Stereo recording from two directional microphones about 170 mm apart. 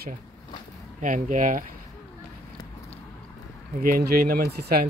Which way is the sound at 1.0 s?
50° right (ahead or behind).